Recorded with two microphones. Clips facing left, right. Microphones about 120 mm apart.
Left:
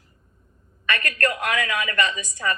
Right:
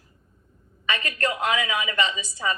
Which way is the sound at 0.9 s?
20° right (ahead or behind).